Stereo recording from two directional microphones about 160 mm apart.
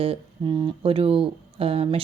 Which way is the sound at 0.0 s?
35° right (ahead or behind).